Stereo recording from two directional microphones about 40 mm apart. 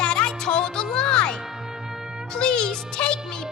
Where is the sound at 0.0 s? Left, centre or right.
Left.